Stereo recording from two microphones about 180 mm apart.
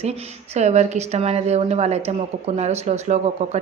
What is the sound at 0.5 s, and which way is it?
A woman's voice, 40° right (ahead or behind).